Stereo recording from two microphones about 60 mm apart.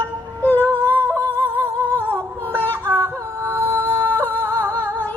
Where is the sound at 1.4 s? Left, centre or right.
Right.